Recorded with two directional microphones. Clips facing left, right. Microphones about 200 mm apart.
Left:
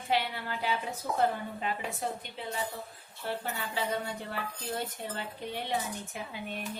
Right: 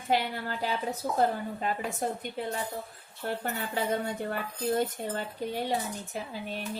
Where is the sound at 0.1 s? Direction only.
45° right (ahead or behind).